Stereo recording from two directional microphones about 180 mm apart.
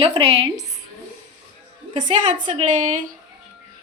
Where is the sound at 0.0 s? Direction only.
30° right (ahead or behind).